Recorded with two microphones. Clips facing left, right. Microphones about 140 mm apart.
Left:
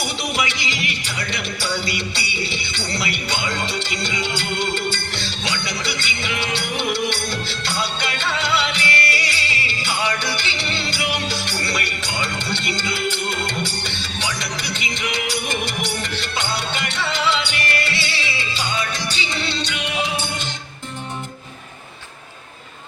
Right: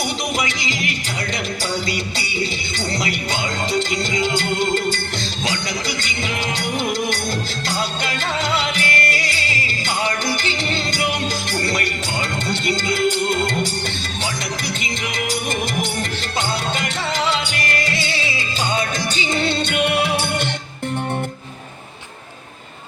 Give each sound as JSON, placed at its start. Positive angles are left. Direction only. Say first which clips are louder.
{"t": 0.3, "sound": "music", "louder": "right 1 dB", "side_deg": -45}
{"t": 2.7, "sound": "music", "louder": "right 3 dB", "side_deg": -45}
{"t": 6.0, "sound": "music", "louder": "right 1 dB", "side_deg": -45}
{"t": 7.7, "sound": "music", "louder": "right 1 dB", "side_deg": -45}
{"t": 16.4, "sound": "music", "louder": "right 4 dB", "side_deg": -45}